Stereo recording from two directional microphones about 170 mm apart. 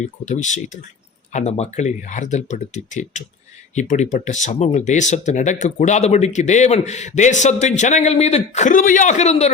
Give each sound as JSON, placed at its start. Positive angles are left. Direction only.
{"t": 0.0, "sound": "speech", "side_deg": 45}